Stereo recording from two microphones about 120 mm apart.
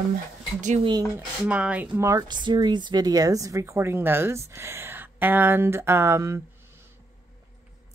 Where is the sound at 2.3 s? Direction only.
40° right (ahead or behind); by 6.4 s 25° right (ahead or behind).